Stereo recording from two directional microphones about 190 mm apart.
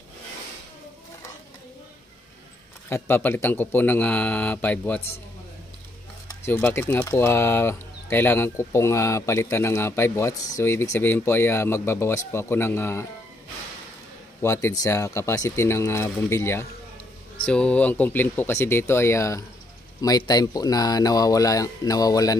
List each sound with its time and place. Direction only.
2.9 s speech: 10° left (ahead or behind)
6.2 s speech: 15° left (ahead or behind)
14.4 s speech: 15° left (ahead or behind)